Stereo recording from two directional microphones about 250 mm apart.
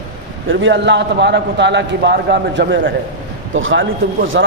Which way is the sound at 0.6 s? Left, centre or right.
Right.